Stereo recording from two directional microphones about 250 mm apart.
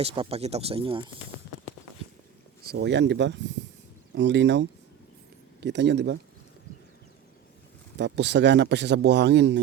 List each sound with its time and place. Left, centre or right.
0.0 s speech: right
2.6 s speech: right
7.9 s speech: right